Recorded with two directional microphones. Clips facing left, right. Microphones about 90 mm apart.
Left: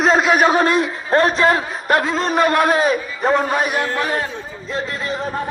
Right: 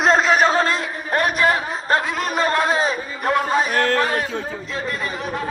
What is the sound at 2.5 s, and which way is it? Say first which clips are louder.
Speech: left 3 dB; 25° right (ahead or behind).